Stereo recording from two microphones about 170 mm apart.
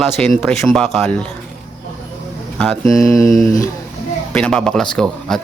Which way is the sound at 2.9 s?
20° left (ahead or behind).